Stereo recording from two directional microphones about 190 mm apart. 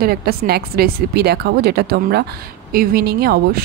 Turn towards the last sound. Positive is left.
turn(degrees=-55)  # may be behind; listen again after turning